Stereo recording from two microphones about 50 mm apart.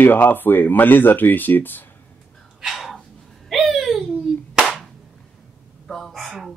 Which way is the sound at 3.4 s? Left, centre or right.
Centre.